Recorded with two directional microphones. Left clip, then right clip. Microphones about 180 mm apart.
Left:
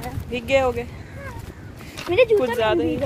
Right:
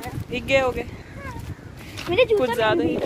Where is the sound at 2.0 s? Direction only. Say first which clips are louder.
Left 2 dB; 10° left (ahead or behind).